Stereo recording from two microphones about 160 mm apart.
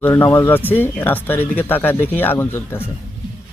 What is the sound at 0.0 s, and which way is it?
Speech, 10° left (ahead or behind).